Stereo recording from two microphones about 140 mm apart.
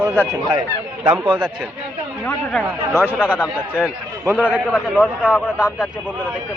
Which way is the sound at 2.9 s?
15° right (ahead or behind).